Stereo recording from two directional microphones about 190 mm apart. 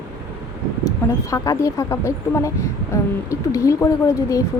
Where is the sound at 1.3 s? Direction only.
15° left (ahead or behind).